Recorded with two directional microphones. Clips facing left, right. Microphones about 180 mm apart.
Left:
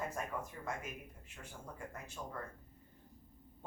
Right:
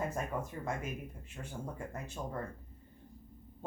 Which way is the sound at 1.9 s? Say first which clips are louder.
Right 6 dB; 25° right (ahead or behind).